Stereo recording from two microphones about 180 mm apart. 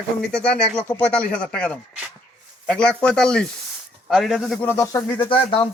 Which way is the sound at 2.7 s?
5° left (ahead or behind).